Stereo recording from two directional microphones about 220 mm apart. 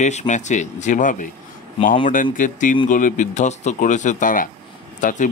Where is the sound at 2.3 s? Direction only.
35° left (ahead or behind).